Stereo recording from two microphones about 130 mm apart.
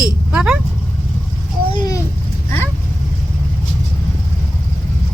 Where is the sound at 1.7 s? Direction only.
30° left (ahead or behind).